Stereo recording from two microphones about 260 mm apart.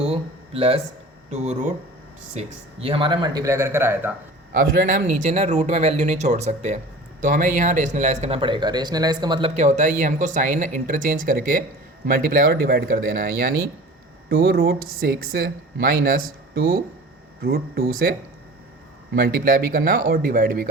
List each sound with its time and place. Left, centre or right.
0.0 s a sound: right
1.3 s a man's voice: right; by 4.1 s centre
4.5 s speech: right
14.8 s a woman's voice: right
15.0 s speech: right
19.1 s speech: right